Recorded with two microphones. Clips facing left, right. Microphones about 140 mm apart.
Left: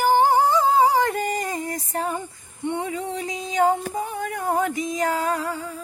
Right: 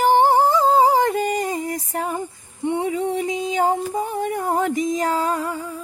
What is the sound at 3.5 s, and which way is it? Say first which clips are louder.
Music: left 1 dB; 35° right (ahead or behind).